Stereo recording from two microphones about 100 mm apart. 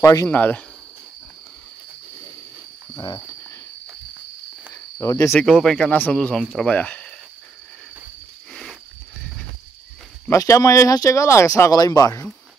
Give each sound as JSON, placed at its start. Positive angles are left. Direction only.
{"t": 0.0, "sound": "speech", "side_deg": 35}
{"t": 0.3, "sound": "speech", "side_deg": 15}
{"t": 4.9, "sound": "speech", "side_deg": 30}
{"t": 5.3, "sound": "speech", "side_deg": 5}
{"t": 10.3, "sound": "speech", "side_deg": 30}